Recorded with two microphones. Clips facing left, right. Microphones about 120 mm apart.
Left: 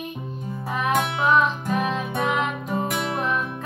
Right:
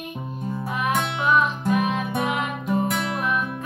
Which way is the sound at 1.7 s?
35° left (ahead or behind).